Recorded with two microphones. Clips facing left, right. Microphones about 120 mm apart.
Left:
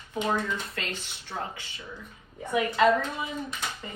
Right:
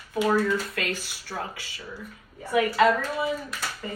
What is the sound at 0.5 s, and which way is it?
A woman's voice, 25° left (ahead or behind).